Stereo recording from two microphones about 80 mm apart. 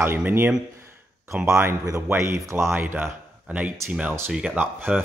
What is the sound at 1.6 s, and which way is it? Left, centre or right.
Speech, right.